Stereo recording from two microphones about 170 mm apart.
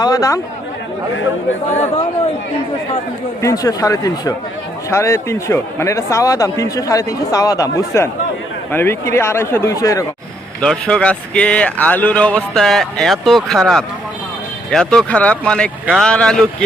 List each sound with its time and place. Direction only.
0.0 s speech: 20° left (ahead or behind)
1.7 s speech: 40° left (ahead or behind)
3.4 s speech: 20° left (ahead or behind)
10.6 s speech: 5° left (ahead or behind)